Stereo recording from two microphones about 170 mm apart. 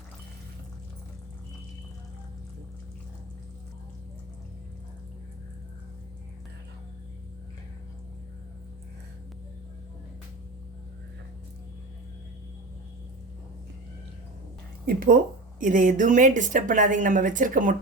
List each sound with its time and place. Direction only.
14.8 s speech: 55° right (ahead or behind)